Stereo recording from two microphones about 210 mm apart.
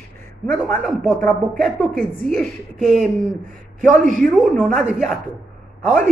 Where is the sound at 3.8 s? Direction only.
40° right (ahead or behind).